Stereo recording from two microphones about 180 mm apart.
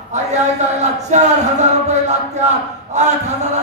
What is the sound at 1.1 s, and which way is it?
Speech, 40° right (ahead or behind).